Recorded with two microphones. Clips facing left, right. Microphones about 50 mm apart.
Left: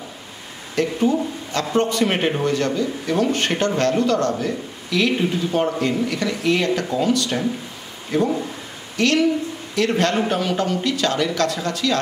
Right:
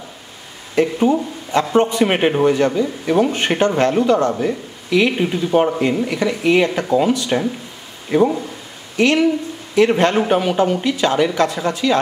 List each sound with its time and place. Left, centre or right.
0.7 s a man's voice: centre